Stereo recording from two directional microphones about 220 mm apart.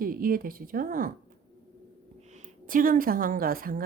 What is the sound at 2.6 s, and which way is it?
A woman's voice, 40° right (ahead or behind).